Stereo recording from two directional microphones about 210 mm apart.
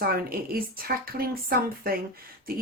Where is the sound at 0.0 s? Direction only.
45° right (ahead or behind).